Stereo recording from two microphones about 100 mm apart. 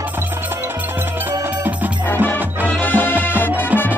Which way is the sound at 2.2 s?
15° left (ahead or behind).